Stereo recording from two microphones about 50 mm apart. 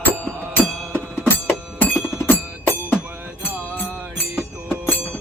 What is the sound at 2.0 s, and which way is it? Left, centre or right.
Music, left.